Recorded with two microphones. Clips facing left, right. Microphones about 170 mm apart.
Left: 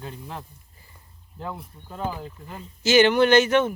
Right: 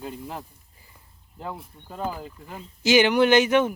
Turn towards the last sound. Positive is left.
turn(degrees=-10)  # may be behind; listen again after turning